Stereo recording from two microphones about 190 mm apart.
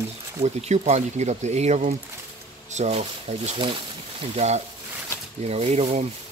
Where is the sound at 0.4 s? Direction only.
35° right (ahead or behind).